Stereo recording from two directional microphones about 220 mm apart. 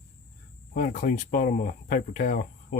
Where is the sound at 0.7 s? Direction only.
35° left (ahead or behind).